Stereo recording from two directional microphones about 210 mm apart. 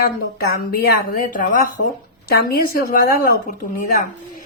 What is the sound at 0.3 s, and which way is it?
Speech, 45° left (ahead or behind).